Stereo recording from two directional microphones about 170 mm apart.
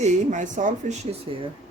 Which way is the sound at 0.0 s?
45° right (ahead or behind).